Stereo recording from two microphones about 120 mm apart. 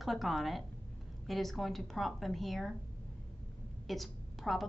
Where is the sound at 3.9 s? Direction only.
Centre (ahead or behind).